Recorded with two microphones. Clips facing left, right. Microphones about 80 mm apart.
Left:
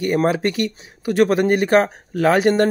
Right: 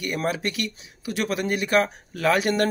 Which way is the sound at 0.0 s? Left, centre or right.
Left.